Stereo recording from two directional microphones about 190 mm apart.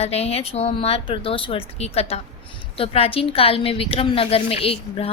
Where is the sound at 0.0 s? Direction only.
35° left (ahead or behind).